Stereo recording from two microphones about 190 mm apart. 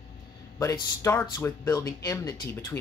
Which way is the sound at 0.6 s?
15° left (ahead or behind).